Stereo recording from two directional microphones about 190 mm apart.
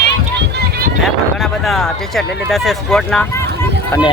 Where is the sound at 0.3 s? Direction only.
60° right (ahead or behind).